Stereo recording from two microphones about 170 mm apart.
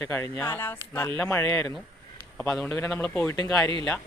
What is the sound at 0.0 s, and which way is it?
A man's voice, 15° left (ahead or behind).